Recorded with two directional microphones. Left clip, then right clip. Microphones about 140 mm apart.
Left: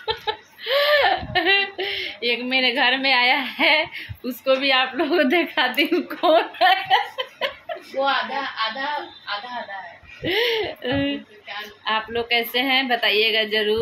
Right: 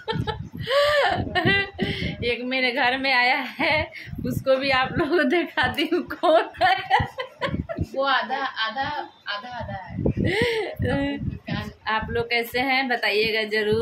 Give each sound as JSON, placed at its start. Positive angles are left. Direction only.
{"t": 0.0, "sound": "chuckle", "side_deg": 30}
{"t": 4.3, "sound": "a woman's voice", "side_deg": 10}
{"t": 10.2, "sound": "a woman's voice", "side_deg": 15}